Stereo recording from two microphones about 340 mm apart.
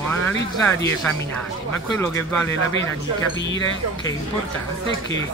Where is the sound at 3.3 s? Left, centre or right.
Left.